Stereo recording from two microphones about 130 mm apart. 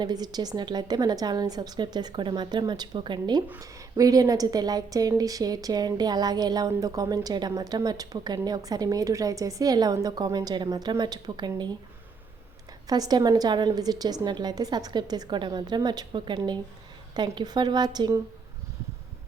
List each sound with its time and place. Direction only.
0.0 s a woman's voice: 30° right (ahead or behind)
12.9 s a woman's voice: 30° right (ahead or behind)